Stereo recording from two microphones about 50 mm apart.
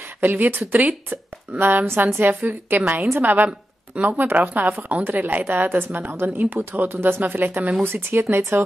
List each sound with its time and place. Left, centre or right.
0.2 s speech: right
0.6 s a woman's voice: right
3.4 s a woman's voice: right